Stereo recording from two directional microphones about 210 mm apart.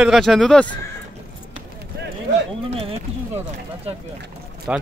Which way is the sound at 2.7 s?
30° right (ahead or behind).